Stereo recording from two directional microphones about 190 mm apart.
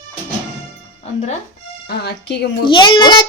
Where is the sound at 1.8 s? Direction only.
60° left (ahead or behind).